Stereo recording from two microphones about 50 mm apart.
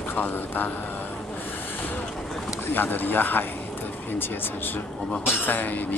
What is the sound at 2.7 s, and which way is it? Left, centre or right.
Speech, left.